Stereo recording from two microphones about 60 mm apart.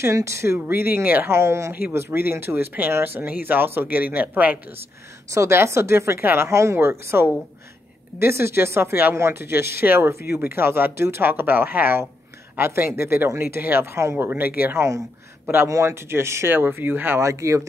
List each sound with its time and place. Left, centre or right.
0.0 s speech: right
0.7 s speech: right
1.3 s speech: right
1.7 s speech: right
5.3 s speech: right
14.3 s speech: right
15.7 s speech: right
16.5 s speech: right
17.2 s speech: right